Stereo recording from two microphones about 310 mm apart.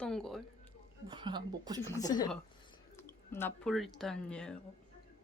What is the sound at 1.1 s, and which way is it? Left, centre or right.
Music, centre.